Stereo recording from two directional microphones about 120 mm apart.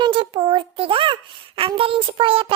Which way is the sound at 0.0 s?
40° right (ahead or behind).